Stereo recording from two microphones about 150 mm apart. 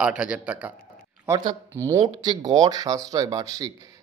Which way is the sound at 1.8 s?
20° right (ahead or behind).